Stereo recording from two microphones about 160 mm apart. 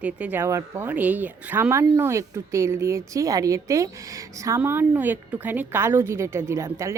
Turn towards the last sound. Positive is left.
turn(degrees=-20)  # may be behind; listen again after turning